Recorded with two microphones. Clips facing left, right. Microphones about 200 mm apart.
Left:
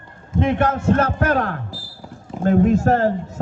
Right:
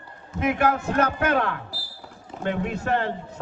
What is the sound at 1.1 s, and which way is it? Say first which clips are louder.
A man's voice: left 3 dB; 40° left (ahead or behind).